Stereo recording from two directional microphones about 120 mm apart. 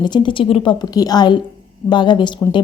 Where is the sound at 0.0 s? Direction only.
40° left (ahead or behind).